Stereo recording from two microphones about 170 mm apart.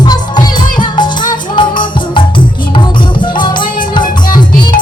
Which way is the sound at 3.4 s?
25° left (ahead or behind).